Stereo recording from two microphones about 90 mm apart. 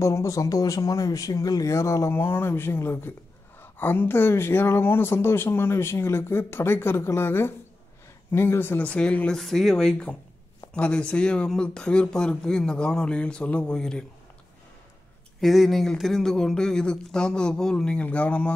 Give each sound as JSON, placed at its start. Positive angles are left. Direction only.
{"t": 0.0, "sound": "speech", "side_deg": 35}
{"t": 9.4, "sound": "speech", "side_deg": 0}
{"t": 15.4, "sound": "speech", "side_deg": 0}